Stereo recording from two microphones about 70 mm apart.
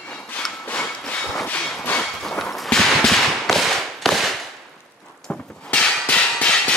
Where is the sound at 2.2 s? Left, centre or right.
Centre.